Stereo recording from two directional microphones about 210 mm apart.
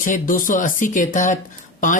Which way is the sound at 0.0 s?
40° left (ahead or behind).